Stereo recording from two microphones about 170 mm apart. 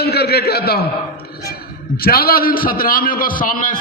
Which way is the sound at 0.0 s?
70° left (ahead or behind).